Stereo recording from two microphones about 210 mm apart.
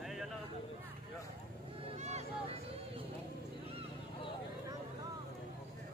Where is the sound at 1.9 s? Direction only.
30° right (ahead or behind).